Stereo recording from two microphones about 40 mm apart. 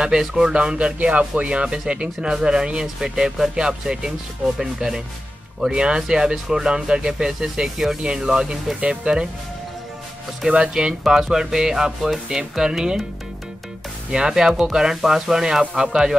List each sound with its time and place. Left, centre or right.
0.0 s speech: centre
4.6 s rub: centre
8.0 s rub: centre
8.8 s speech: right
10.4 s speech: centre
10.8 s rub: centre
14.1 s rub: centre